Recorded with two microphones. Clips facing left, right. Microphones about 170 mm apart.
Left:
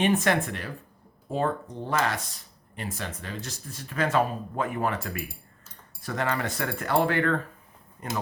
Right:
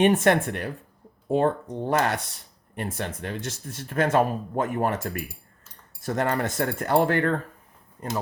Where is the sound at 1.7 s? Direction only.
55° right (ahead or behind).